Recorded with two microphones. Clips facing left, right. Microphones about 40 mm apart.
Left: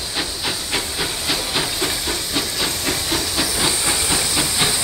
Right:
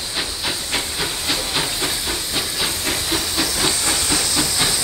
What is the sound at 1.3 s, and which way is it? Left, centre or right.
Hiss, centre.